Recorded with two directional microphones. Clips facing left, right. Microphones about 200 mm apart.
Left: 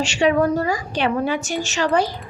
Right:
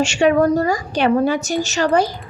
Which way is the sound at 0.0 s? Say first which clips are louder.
Right 3 dB; 50° right (ahead or behind).